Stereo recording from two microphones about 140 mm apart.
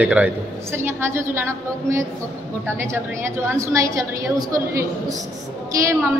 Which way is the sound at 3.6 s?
20° right (ahead or behind).